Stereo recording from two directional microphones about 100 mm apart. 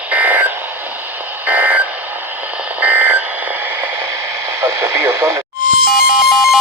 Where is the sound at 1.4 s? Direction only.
15° right (ahead or behind).